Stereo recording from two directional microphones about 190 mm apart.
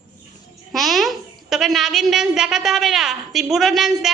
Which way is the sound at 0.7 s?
Centre (ahead or behind).